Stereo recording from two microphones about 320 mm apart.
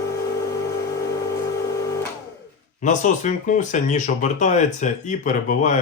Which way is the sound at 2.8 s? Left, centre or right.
Left.